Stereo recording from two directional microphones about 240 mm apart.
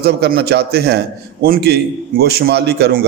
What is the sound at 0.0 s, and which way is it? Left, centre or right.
A man's voice, right.